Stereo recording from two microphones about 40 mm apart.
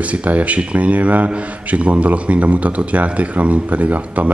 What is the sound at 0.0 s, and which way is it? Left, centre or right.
A man's voice, right.